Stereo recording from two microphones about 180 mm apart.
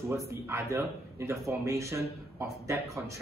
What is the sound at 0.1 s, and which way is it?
Speech, 15° right (ahead or behind).